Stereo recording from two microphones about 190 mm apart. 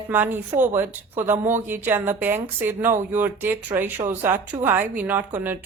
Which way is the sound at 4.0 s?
25° right (ahead or behind).